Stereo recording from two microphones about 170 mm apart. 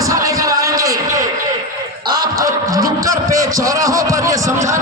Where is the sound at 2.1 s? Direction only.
25° right (ahead or behind).